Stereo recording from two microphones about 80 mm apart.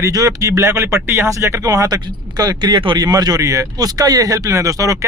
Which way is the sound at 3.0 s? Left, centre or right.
Right.